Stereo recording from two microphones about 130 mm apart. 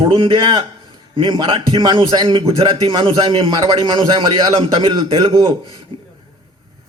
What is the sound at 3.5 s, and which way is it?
Speech, 35° right (ahead or behind).